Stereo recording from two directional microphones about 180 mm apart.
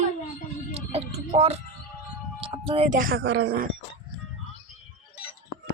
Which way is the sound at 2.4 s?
30° right (ahead or behind).